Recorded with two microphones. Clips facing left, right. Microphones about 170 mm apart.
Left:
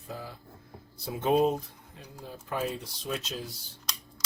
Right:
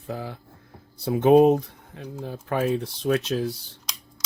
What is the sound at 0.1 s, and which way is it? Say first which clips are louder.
Speech: right 8 dB; 70° right (ahead or behind).